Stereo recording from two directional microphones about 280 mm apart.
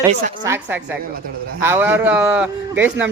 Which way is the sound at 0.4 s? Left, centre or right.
Centre.